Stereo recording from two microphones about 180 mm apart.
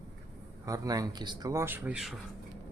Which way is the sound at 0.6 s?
20° right (ahead or behind).